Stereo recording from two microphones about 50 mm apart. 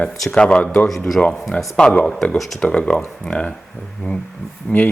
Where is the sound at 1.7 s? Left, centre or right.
Centre; by 4.9 s left.